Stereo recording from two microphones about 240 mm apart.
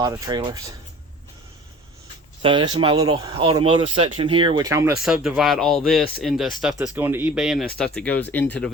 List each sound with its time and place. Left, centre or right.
0.0 s speech: centre
2.4 s speech: centre
3.9 s speech: right
4.2 s speech: right; by 8.7 s centre